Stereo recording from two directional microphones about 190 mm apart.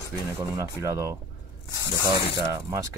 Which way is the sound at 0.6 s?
15° right (ahead or behind).